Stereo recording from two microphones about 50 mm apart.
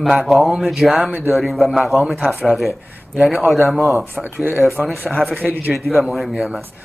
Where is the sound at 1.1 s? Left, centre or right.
Right.